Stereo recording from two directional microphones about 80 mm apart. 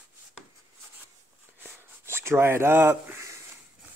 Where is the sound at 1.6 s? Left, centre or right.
Right.